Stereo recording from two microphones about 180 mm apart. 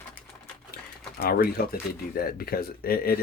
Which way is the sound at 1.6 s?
55° left (ahead or behind).